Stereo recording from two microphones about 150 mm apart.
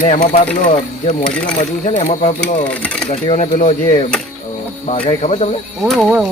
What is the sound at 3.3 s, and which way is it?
Speech, 50° left (ahead or behind).